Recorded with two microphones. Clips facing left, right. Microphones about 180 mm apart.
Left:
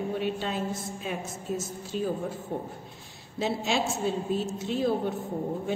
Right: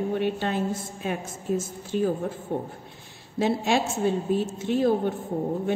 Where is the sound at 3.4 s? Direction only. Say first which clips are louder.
Right 4 dB; 55° right (ahead or behind).